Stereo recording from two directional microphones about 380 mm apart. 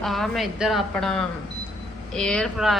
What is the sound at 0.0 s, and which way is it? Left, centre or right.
A woman's voice, centre.